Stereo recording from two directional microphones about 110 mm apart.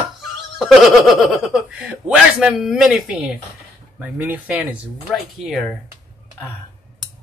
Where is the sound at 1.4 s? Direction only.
10° right (ahead or behind).